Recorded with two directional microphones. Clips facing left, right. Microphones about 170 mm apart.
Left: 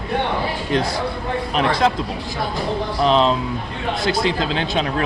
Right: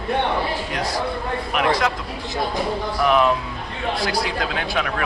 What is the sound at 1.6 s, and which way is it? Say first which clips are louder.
Speech: left 2 dB; 30° left (ahead or behind).